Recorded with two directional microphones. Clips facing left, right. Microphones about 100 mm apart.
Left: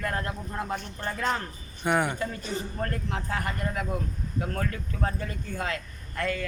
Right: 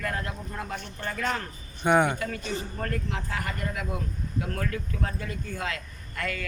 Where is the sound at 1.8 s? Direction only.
Centre (ahead or behind).